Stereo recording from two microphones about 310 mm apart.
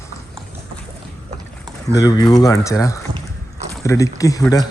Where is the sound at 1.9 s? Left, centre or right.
Centre.